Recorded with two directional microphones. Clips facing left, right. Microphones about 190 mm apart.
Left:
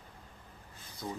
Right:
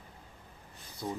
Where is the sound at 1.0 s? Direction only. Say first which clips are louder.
Right 3 dB; 10° right (ahead or behind).